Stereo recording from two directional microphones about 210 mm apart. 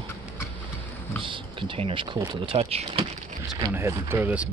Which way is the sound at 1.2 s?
25° right (ahead or behind).